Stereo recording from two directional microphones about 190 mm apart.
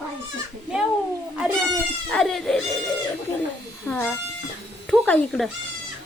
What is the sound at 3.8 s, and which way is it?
Speech, 10° left (ahead or behind).